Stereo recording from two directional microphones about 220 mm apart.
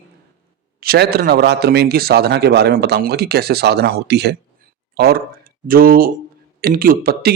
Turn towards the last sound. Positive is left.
turn(degrees=-45)  # may be behind; listen again after turning